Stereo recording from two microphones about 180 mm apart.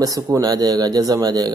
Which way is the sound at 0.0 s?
20° right (ahead or behind).